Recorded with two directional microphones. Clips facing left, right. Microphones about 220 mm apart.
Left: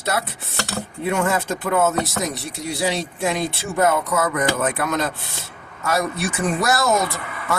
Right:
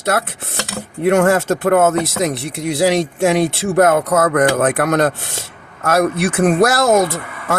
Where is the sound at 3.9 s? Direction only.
50° right (ahead or behind).